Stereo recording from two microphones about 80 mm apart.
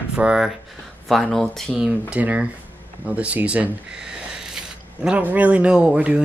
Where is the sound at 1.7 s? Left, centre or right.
Centre.